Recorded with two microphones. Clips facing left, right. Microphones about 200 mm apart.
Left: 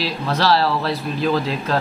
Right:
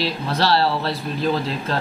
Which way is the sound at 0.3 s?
30° right (ahead or behind).